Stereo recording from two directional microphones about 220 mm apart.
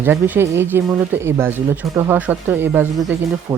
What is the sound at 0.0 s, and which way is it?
Speech, 10° right (ahead or behind).